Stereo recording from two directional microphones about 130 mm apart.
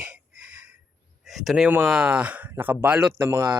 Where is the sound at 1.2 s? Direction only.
Centre (ahead or behind).